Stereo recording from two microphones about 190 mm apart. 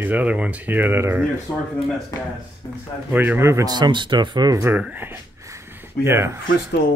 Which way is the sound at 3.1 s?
10° right (ahead or behind).